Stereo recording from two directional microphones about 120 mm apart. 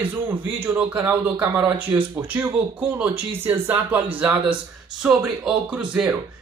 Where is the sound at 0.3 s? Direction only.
15° right (ahead or behind).